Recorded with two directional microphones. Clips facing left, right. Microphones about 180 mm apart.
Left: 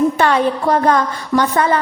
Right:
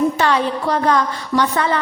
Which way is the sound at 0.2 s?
50° left (ahead or behind).